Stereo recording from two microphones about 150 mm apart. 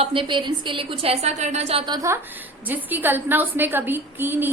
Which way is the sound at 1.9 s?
20° right (ahead or behind).